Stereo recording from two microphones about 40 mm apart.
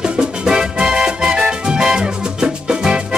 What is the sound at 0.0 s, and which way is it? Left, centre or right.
Music, centre.